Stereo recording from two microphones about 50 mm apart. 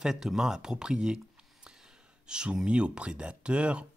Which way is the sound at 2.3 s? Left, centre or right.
Centre.